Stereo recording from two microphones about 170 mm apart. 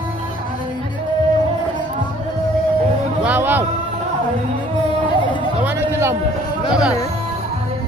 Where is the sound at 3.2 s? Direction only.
10° right (ahead or behind).